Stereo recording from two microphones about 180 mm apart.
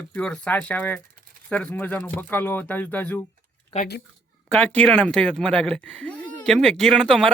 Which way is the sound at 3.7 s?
55° left (ahead or behind).